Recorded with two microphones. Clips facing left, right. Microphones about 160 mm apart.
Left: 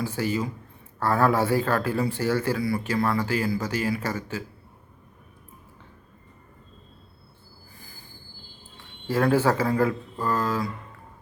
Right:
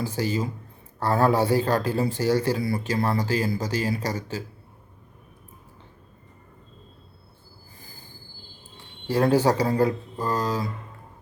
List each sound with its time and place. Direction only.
0.0 s speech: 40° right (ahead or behind)
9.3 s speech: 35° right (ahead or behind)